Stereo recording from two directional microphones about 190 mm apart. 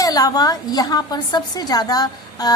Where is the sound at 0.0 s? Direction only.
20° left (ahead or behind).